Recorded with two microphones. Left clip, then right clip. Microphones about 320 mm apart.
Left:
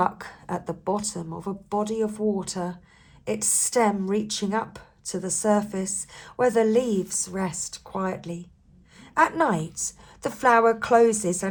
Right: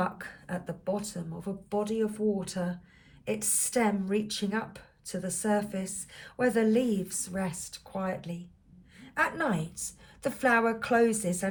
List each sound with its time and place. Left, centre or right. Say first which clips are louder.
0.2 s speech: left 6 dB; centre